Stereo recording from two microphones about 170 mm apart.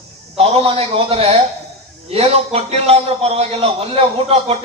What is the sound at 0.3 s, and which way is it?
A man's voice, 35° right (ahead or behind).